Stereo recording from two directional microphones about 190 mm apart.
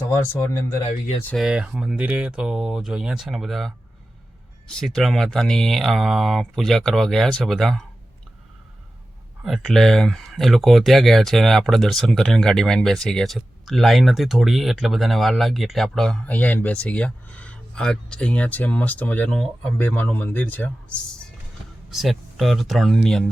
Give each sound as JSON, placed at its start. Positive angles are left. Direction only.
{"t": 0.1, "sound": "speech", "side_deg": 15}
{"t": 0.9, "sound": "speech", "side_deg": 35}
{"t": 1.4, "sound": "speech", "side_deg": -5}
{"t": 4.7, "sound": "speech", "side_deg": 5}
{"t": 9.4, "sound": "speech", "side_deg": 0}
{"t": 21.8, "sound": "speech", "side_deg": 0}